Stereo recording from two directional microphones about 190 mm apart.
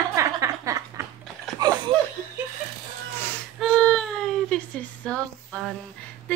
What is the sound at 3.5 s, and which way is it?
Baby cry, 5° left (ahead or behind).